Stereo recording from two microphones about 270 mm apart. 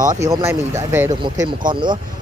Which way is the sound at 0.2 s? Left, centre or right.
Centre.